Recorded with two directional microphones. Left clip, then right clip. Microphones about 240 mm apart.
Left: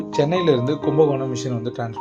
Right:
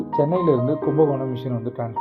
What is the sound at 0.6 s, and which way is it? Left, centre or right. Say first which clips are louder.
Speech: left 1 dB; centre.